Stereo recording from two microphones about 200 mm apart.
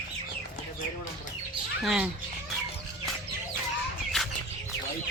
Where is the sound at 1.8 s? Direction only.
Centre (ahead or behind).